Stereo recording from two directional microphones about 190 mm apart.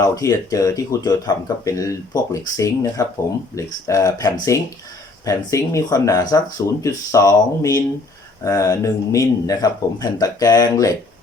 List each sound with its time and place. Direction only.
0.0 s speech: 15° left (ahead or behind)